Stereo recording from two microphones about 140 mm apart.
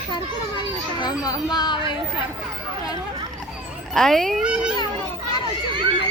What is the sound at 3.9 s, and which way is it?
Speech, 5° left (ahead or behind).